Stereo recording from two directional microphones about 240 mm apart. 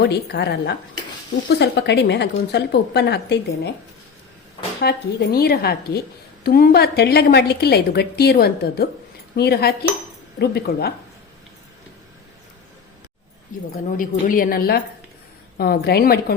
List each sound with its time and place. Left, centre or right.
0.0 s speech: left
4.8 s a woman's voice: left
13.5 s a woman's voice: left